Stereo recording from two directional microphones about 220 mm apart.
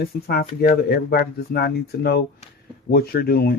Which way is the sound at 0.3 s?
40° left (ahead or behind).